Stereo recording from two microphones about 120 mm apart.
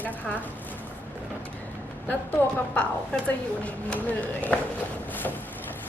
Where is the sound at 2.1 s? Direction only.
10° left (ahead or behind).